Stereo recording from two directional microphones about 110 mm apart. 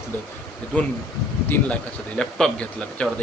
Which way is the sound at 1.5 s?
10° left (ahead or behind).